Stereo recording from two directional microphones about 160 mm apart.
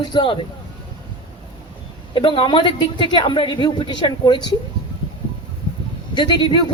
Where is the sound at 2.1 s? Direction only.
30° left (ahead or behind).